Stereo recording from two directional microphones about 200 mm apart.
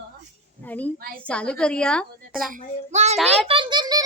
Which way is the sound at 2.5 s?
35° right (ahead or behind).